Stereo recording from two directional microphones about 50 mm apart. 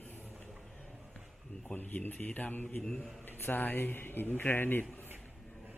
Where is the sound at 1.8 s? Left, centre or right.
Left.